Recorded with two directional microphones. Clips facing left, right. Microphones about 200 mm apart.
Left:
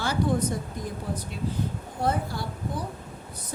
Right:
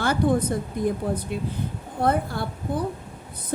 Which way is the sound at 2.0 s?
55° right (ahead or behind).